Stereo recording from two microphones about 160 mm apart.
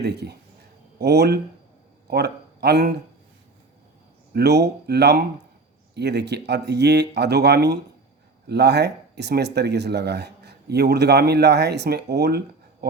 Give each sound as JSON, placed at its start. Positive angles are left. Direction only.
{"t": 0.0, "sound": "speech", "side_deg": -90}
{"t": 4.4, "sound": "speech", "side_deg": -90}